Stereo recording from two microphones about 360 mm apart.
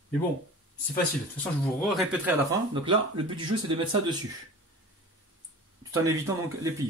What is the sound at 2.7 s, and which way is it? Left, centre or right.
Speech, centre.